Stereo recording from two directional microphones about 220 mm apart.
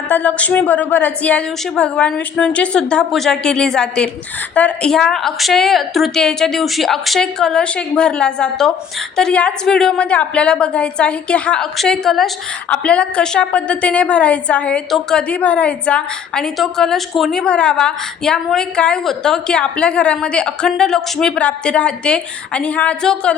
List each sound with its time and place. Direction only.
0.1 s a woman's voice: 5° left (ahead or behind)